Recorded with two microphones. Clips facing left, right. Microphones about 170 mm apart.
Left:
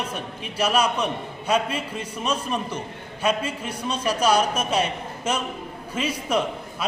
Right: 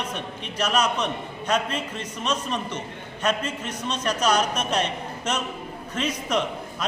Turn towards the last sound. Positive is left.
turn(degrees=5)  # may be behind; listen again after turning